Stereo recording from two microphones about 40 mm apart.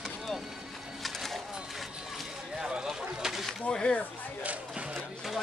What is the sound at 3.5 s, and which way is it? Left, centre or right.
Speech, left.